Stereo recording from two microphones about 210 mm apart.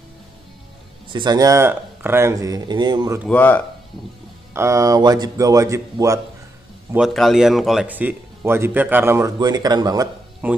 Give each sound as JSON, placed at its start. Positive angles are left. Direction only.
{"t": 1.1, "sound": "speech", "side_deg": -20}
{"t": 3.3, "sound": "speech", "side_deg": 10}
{"t": 4.6, "sound": "speech", "side_deg": -15}
{"t": 6.9, "sound": "speech", "side_deg": 0}
{"t": 10.4, "sound": "speech", "side_deg": -10}